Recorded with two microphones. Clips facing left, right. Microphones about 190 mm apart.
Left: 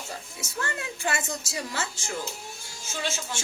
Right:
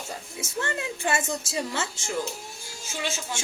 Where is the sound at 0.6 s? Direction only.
25° right (ahead or behind).